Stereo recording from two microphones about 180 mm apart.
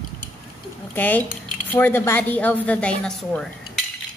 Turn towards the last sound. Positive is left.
turn(degrees=5)  # may be behind; listen again after turning